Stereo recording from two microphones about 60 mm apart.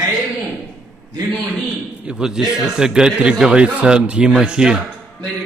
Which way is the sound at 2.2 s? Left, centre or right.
Centre.